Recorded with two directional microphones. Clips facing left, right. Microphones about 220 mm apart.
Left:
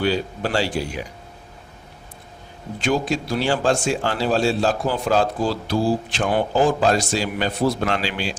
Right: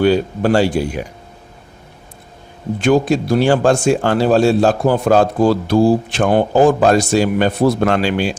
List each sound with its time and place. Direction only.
0.0 s a man's voice: 50° right (ahead or behind)
2.8 s a man's voice: 55° right (ahead or behind)